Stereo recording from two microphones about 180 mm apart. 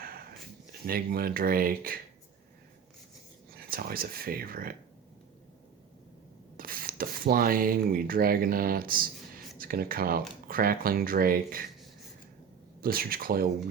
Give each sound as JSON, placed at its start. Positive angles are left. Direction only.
{"t": 0.7, "sound": "speech", "side_deg": -55}
{"t": 3.5, "sound": "speech", "side_deg": -55}
{"t": 6.6, "sound": "speech", "side_deg": -55}
{"t": 12.8, "sound": "speech", "side_deg": -55}